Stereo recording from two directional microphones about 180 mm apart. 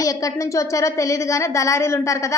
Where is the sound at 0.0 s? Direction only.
20° left (ahead or behind).